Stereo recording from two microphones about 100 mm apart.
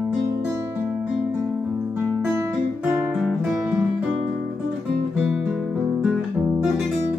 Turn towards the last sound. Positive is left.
turn(degrees=-10)  # may be behind; listen again after turning